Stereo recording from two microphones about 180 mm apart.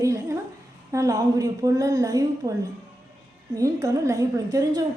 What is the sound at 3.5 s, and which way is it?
A woman's voice, 20° right (ahead or behind).